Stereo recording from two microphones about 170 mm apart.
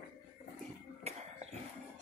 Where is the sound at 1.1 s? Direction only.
40° right (ahead or behind).